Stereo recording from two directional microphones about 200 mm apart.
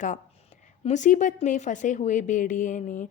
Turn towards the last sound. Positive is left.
turn(degrees=40)  # may be behind; listen again after turning